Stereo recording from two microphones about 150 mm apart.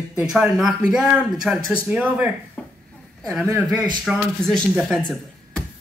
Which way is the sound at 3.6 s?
5° right (ahead or behind).